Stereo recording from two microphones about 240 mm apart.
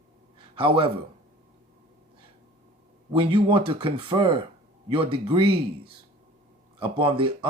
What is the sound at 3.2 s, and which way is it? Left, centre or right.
Speech, right.